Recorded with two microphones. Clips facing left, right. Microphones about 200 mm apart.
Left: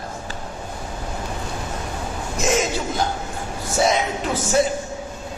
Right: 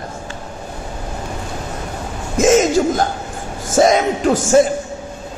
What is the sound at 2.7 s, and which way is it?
A man's voice, 45° right (ahead or behind).